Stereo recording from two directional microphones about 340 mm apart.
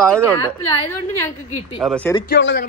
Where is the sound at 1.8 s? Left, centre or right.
Centre.